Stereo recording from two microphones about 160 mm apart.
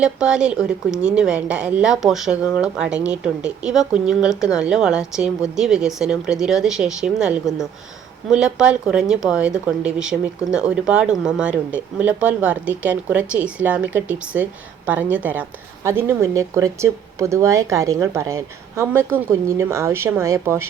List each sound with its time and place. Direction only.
0.0 s a woman's voice: 5° right (ahead or behind)